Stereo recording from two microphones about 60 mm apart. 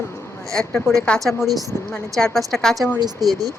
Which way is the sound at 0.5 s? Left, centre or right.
Centre.